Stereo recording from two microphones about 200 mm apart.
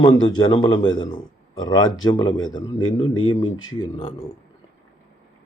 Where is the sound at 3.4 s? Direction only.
20° left (ahead or behind).